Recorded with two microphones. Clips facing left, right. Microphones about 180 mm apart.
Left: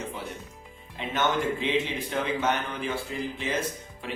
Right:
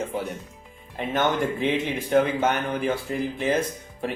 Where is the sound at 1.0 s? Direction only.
50° right (ahead or behind).